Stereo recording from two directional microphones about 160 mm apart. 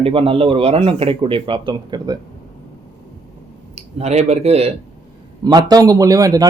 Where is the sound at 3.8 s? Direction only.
40° right (ahead or behind).